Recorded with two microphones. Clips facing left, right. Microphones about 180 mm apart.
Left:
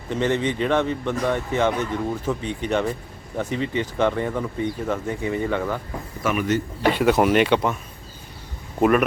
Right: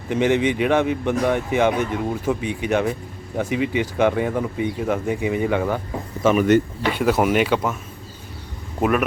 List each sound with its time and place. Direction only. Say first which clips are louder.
0.1 s speech: right 4 dB; 15° right (ahead or behind)
6.2 s speech: right 7 dB; 25° right (ahead or behind)
7.0 s speech: even; 5° right (ahead or behind)
8.8 s speech: left 2 dB; centre (ahead or behind)